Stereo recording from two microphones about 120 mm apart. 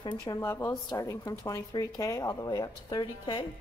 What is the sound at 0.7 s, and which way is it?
Speech, 30° left (ahead or behind).